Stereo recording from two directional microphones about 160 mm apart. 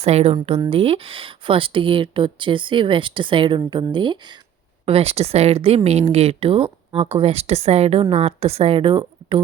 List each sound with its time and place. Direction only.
0.0 s speech: 40° right (ahead or behind)
4.9 s speech: 40° right (ahead or behind)